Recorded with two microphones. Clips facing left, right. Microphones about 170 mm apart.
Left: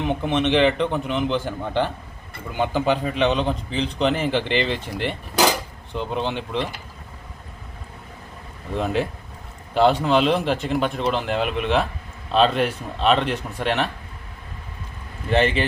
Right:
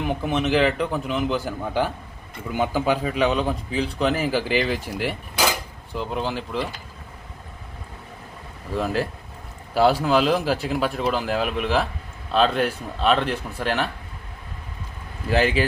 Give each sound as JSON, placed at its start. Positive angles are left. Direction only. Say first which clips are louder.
{"t": 0.0, "sound": "speech", "louder": "left 2 dB", "side_deg": -5}
{"t": 8.7, "sound": "speech", "louder": "left 1 dB", "side_deg": 0}
{"t": 15.3, "sound": "speech", "louder": "left 1 dB", "side_deg": -5}